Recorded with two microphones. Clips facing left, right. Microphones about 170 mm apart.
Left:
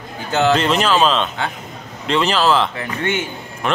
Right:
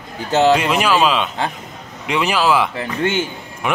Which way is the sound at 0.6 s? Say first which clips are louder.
Even; 10° right (ahead or behind).